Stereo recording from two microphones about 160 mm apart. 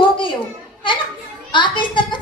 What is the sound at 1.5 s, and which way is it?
Speech, 30° left (ahead or behind).